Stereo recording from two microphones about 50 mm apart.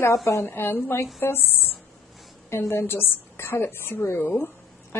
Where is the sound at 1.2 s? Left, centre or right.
Left.